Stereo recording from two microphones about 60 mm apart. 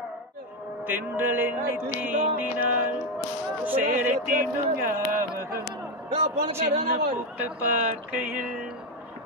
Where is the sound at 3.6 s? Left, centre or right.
Right.